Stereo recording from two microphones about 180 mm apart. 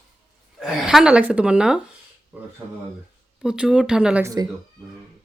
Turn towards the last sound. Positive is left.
turn(degrees=-20)  # may be behind; listen again after turning